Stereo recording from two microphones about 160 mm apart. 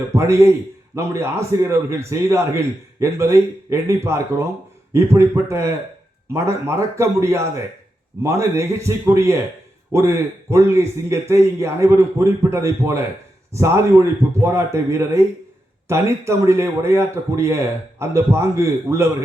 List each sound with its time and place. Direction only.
0.1 s a man's voice: 15° right (ahead or behind)